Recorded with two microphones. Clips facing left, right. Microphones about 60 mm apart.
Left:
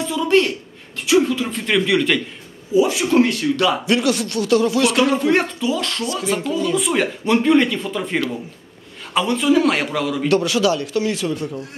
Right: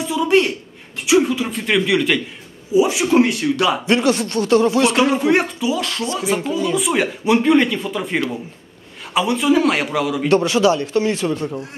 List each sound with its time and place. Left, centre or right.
0.0 s a sound: centre
1.0 s speech: centre
2.7 s speech: centre
3.8 s speech: right
5.1 s speech: centre
10.2 s speech: right